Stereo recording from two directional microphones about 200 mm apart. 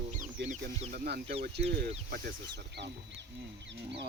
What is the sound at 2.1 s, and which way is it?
Speech, 60° right (ahead or behind).